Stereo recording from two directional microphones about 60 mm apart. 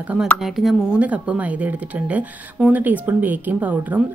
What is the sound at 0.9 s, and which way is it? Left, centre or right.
A woman's voice, centre.